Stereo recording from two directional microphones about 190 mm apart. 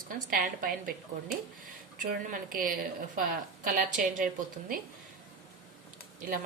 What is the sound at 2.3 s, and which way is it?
A woman's voice, 45° right (ahead or behind).